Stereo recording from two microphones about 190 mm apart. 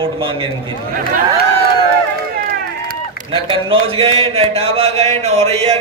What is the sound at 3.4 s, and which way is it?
Speech, 30° right (ahead or behind).